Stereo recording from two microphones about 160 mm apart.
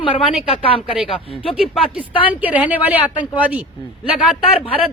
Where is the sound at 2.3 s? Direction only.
10° right (ahead or behind).